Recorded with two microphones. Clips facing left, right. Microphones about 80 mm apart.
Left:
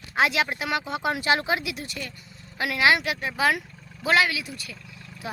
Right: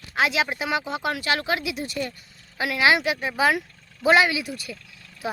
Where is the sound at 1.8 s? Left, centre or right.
Right.